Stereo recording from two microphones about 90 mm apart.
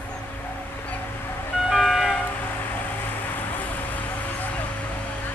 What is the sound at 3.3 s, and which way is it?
Vehicle, 20° left (ahead or behind).